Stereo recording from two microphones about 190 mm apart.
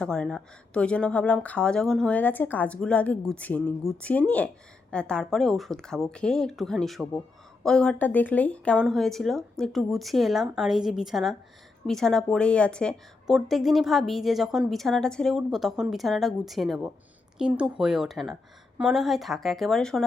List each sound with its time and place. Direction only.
0.0 s a woman's voice: 5° left (ahead or behind)